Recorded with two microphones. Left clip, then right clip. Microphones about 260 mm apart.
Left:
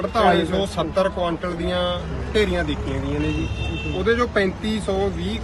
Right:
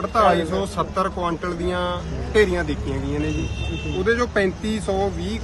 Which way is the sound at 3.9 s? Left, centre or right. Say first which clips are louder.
Even; centre.